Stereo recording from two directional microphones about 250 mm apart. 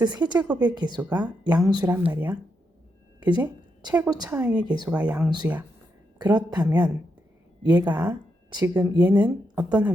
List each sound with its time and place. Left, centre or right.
0.0 s speech: centre
0.3 s speech: centre
0.6 s speech: centre
3.2 s a sound: centre
3.4 s a woman's voice: centre
4.4 s speech: centre
6.1 s speech: centre
7.9 s speech: centre